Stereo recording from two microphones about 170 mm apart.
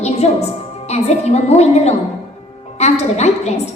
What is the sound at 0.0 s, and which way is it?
Music, 40° left (ahead or behind).